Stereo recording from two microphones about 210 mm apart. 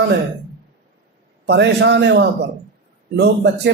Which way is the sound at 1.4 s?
55° right (ahead or behind).